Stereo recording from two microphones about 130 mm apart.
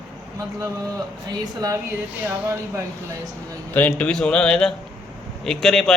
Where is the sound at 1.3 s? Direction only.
30° right (ahead or behind).